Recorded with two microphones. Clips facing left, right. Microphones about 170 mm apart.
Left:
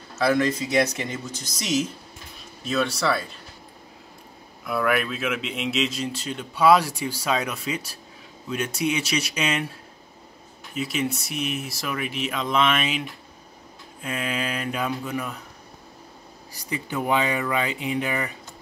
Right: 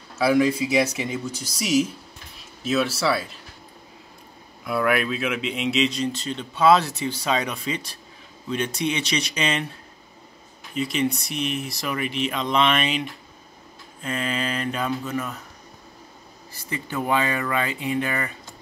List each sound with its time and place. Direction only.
0.2 s a man's voice: 10° right (ahead or behind)
4.6 s a man's voice: centre (ahead or behind)
16.5 s speech: 15° left (ahead or behind)